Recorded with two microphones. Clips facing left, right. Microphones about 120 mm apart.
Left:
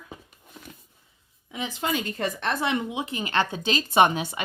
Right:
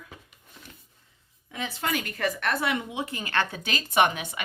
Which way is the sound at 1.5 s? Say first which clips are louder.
Left 2 dB; 20° left (ahead or behind).